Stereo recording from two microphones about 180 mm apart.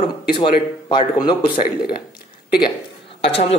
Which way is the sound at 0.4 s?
25° left (ahead or behind).